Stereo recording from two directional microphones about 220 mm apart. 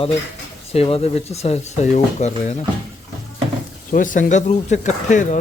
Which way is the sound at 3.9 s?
35° left (ahead or behind).